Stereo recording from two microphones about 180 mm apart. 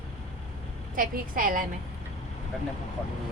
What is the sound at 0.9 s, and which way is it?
Speech, 50° right (ahead or behind).